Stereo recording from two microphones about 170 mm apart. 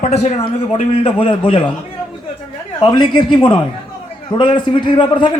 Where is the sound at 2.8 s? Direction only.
25° left (ahead or behind).